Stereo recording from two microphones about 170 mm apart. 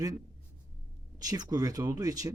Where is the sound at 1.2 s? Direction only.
20° right (ahead or behind).